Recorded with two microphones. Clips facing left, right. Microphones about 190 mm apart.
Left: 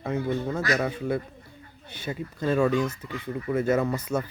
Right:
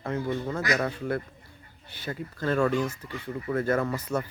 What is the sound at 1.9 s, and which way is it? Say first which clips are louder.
Speech: left 2 dB; 20° left (ahead or behind).